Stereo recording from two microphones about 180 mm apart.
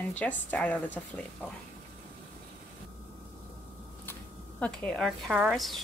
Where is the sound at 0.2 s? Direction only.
10° left (ahead or behind).